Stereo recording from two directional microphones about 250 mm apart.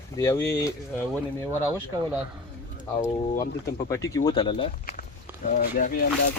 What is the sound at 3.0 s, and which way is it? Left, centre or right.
Speech, left.